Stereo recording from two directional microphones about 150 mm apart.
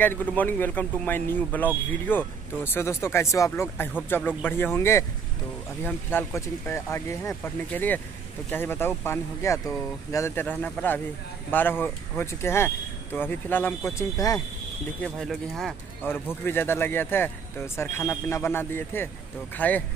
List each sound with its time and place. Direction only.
0.0 s speech: 10° left (ahead or behind)
15.0 s speech: centre (ahead or behind)
16.0 s speech: 15° left (ahead or behind)